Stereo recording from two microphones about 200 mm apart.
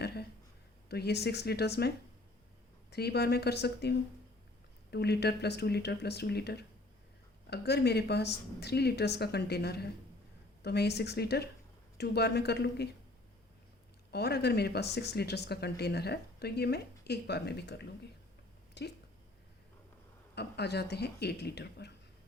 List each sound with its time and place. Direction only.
0.0 s a sound: 55° left (ahead or behind)
0.9 s speech: 55° left (ahead or behind)
2.9 s speech: 55° left (ahead or behind)
14.1 s speech: 55° left (ahead or behind)
18.8 s speech: 60° left (ahead or behind)
20.3 s speech: 55° left (ahead or behind)